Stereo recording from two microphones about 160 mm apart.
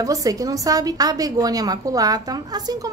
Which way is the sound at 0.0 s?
20° right (ahead or behind).